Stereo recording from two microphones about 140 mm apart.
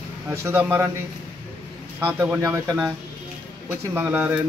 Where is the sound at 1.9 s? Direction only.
15° right (ahead or behind).